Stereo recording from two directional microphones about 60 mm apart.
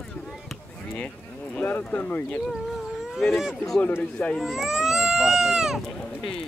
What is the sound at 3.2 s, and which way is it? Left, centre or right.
Speech, centre.